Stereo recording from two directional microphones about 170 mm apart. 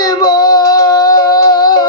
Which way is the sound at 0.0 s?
25° left (ahead or behind).